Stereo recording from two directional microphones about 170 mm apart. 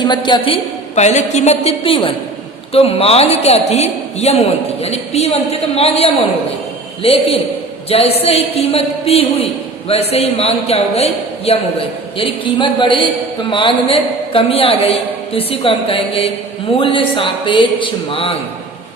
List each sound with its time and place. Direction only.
0.0 s a woman's voice: 25° left (ahead or behind)